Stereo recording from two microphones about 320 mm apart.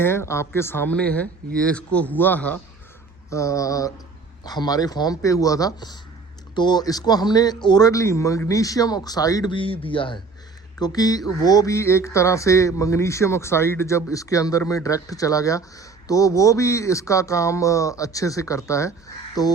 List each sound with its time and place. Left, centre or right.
0.0 s speech: centre